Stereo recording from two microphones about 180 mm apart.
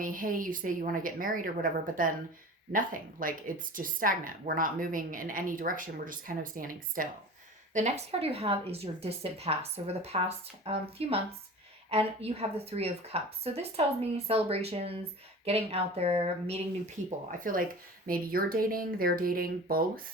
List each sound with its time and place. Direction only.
0.0 s speech: 50° right (ahead or behind)
7.7 s speech: 40° right (ahead or behind)
17.4 s speech: 50° right (ahead or behind)